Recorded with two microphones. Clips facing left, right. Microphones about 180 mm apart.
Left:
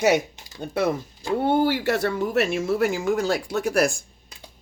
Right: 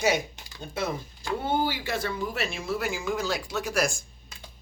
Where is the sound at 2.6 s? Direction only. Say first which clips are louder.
Left 8 dB; 50° left (ahead or behind).